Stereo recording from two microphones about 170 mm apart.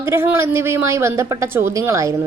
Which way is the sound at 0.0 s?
15° right (ahead or behind).